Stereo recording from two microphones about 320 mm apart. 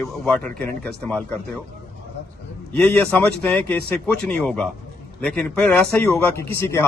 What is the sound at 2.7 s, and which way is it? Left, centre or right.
A man's voice, centre.